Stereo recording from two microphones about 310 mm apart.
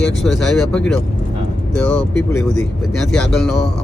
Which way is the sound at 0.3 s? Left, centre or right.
Centre.